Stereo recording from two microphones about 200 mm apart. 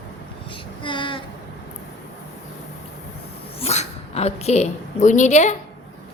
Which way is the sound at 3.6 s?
30° left (ahead or behind).